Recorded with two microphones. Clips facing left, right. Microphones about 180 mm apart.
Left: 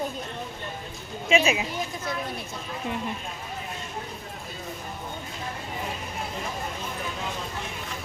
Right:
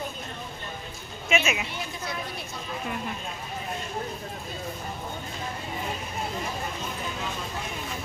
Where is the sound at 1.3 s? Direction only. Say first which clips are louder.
Left 4 dB; 30° left (ahead or behind).